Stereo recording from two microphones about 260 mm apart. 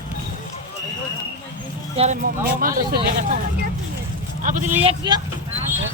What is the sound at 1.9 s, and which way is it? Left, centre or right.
Speech, right.